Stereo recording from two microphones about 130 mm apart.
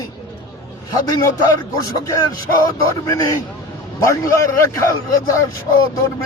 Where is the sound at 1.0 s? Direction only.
30° left (ahead or behind).